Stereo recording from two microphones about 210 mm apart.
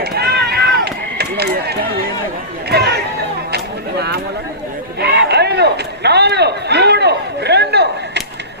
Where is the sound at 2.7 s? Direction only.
50° right (ahead or behind).